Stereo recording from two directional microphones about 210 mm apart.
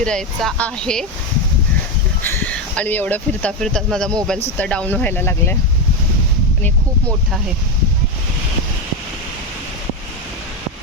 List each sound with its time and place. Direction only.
0.0 s speech: 5° left (ahead or behind)
2.2 s speech: 10° left (ahead or behind)